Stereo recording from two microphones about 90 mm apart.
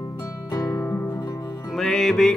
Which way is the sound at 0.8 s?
25° left (ahead or behind).